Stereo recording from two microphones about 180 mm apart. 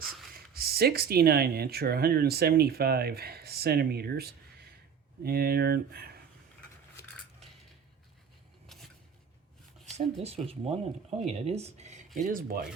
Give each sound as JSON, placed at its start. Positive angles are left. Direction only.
{"t": 0.3, "sound": "speech", "side_deg": -55}
{"t": 8.6, "sound": "a sound", "side_deg": 0}
{"t": 9.8, "sound": "speech", "side_deg": -35}